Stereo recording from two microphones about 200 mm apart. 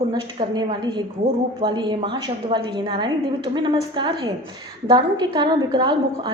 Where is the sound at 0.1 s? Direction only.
20° right (ahead or behind).